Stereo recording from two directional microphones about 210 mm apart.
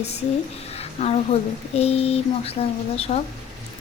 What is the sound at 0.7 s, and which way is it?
Speech, 30° left (ahead or behind).